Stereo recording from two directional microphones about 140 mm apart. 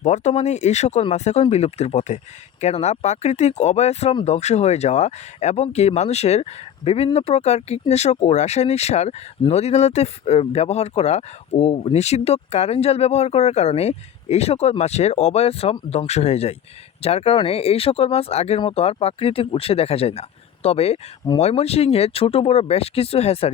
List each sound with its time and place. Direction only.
0.0 s speech: 55° left (ahead or behind)